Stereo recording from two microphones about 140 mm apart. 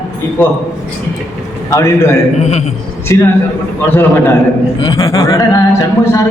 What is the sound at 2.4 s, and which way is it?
Speech, 55° left (ahead or behind).